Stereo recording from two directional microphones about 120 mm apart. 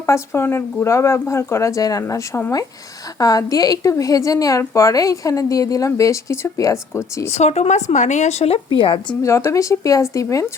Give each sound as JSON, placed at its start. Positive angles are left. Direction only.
{"t": 0.0, "sound": "a woman's voice", "side_deg": 20}
{"t": 7.3, "sound": "speech", "side_deg": 65}
{"t": 8.8, "sound": "a woman's voice", "side_deg": 45}
{"t": 9.2, "sound": "a woman's voice", "side_deg": 25}